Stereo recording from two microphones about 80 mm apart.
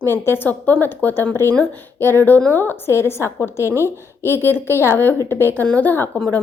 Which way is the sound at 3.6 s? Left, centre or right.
Right.